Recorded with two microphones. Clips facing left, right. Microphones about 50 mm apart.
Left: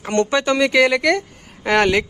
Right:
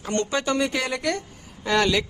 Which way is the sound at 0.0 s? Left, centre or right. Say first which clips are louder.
Left 6 dB; left.